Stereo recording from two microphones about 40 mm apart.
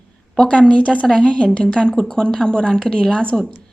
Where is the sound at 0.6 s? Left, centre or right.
Left.